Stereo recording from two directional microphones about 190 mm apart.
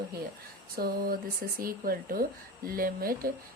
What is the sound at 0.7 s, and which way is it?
A woman's voice, 50° right (ahead or behind).